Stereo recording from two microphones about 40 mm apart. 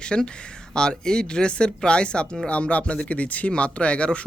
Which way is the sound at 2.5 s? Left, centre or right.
Left.